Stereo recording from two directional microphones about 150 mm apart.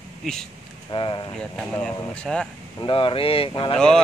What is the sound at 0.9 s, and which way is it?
Speech, 35° left (ahead or behind).